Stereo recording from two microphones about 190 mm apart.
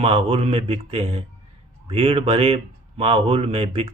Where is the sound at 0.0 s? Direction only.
30° right (ahead or behind).